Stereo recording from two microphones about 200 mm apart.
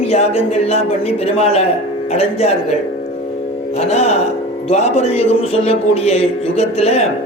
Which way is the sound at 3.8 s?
35° left (ahead or behind).